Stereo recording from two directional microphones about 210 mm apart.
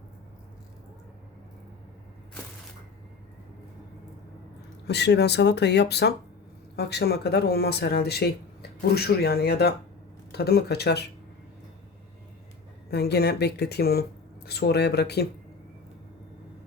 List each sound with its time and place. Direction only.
4.9 s speech: 55° left (ahead or behind)
12.9 s speech: 50° left (ahead or behind)